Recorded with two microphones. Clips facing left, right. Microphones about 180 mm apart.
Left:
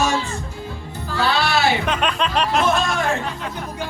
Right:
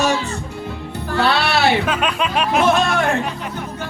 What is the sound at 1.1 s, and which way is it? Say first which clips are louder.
Music: right 2 dB; 60° right (ahead or behind).